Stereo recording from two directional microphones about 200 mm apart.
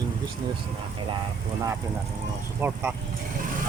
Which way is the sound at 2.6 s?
10° right (ahead or behind).